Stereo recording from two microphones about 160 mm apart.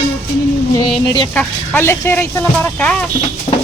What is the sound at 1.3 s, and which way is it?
Speech, 10° left (ahead or behind).